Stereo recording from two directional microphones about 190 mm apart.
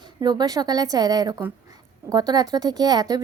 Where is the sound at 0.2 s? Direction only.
20° right (ahead or behind).